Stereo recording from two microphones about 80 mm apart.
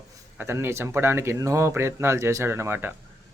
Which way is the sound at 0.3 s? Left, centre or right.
Right.